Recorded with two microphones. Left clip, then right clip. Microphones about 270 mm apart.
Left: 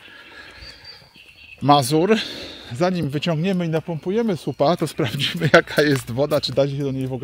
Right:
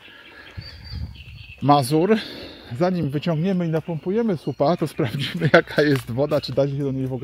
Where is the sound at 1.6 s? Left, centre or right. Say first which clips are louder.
Left 1 dB; centre.